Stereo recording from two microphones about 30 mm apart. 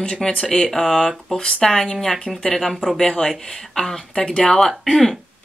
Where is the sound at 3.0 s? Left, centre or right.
Centre.